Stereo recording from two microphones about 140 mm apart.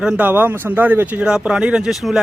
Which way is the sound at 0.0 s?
10° right (ahead or behind).